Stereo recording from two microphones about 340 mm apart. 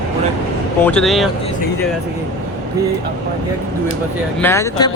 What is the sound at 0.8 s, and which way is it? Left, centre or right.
Speech, centre.